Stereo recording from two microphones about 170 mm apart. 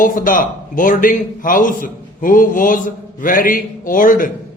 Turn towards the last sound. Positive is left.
turn(degrees=55)  # may be behind; listen again after turning